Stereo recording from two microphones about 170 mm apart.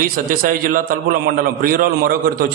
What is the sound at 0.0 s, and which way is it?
A man's voice, 55° right (ahead or behind).